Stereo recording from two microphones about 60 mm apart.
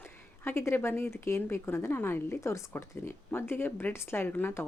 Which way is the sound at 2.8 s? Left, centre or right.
Left.